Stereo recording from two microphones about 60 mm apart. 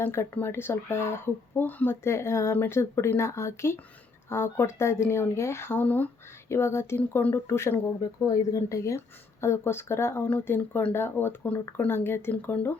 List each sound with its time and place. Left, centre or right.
0.0 s speech: left
2.0 s speech: left
5.8 s speech: left
6.5 s speech: left
7.2 s speech: left
7.4 s speech: left
8.5 s a woman's voice: left
9.0 s speech: left